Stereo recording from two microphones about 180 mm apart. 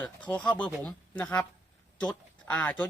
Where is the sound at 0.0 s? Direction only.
5° left (ahead or behind).